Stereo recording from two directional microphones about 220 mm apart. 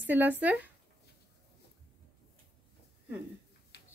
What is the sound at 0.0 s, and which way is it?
Speech, 10° right (ahead or behind).